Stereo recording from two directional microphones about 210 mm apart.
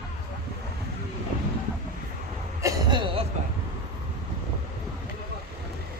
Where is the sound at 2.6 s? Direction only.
20° right (ahead or behind).